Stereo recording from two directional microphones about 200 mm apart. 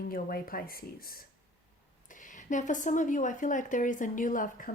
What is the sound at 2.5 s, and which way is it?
Speech, 40° left (ahead or behind).